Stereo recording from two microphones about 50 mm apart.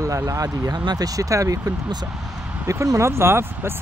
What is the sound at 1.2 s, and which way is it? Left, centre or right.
Speech, right.